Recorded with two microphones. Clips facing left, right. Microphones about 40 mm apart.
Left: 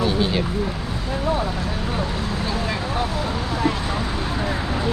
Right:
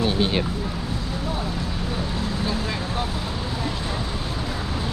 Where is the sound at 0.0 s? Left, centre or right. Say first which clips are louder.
Left 1 dB; right.